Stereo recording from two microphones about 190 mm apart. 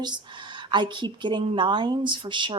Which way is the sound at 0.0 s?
25° right (ahead or behind).